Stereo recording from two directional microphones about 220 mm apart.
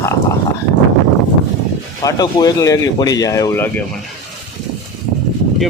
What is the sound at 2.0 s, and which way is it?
Speech, 15° left (ahead or behind).